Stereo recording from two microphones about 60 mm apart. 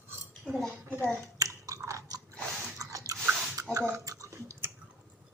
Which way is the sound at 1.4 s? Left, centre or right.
Right.